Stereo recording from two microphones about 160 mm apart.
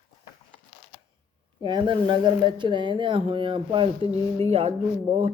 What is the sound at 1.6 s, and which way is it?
Speech, 30° right (ahead or behind).